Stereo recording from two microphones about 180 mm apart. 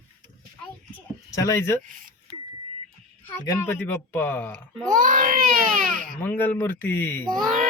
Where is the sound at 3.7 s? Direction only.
15° left (ahead or behind).